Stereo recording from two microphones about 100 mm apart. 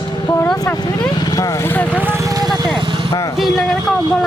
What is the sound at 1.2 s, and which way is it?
Speech, 35° left (ahead or behind).